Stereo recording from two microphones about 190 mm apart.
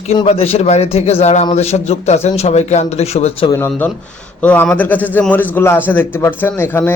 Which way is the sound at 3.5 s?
15° left (ahead or behind).